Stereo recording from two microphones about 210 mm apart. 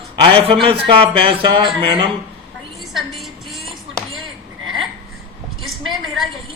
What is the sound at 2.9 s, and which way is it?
Music, centre (ahead or behind).